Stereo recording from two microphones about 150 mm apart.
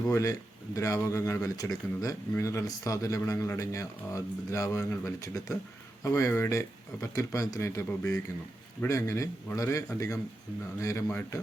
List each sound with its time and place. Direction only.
0.1 s speech: 20° left (ahead or behind)